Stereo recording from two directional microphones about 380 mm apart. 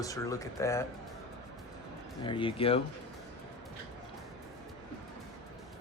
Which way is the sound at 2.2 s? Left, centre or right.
Centre.